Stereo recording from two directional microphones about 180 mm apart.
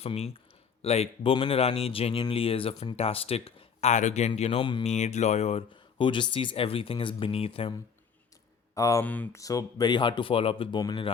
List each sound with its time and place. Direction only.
0.0 s speech: 35° left (ahead or behind)
8.7 s speech: 15° left (ahead or behind)
9.4 s speech: 20° left (ahead or behind)